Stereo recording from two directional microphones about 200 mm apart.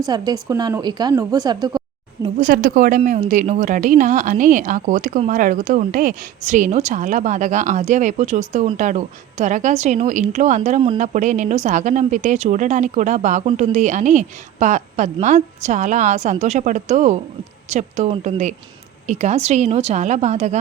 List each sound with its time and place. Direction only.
0.0 s a woman's voice: 20° right (ahead or behind)
2.4 s a woman's voice: 45° right (ahead or behind)